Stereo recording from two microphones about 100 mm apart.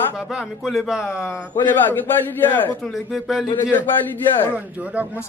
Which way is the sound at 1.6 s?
20° left (ahead or behind).